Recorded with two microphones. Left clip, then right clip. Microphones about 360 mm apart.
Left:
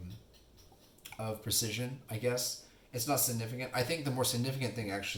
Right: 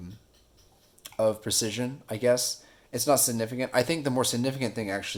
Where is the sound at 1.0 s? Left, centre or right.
Right.